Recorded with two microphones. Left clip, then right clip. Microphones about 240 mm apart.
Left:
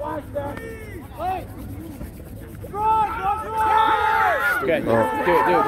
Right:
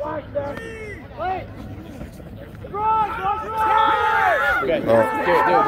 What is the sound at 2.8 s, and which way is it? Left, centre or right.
Boat, left.